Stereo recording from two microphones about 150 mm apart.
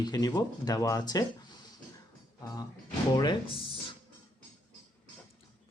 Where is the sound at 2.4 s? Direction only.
25° left (ahead or behind).